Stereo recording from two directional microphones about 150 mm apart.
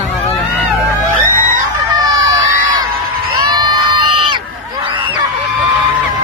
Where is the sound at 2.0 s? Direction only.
25° right (ahead or behind).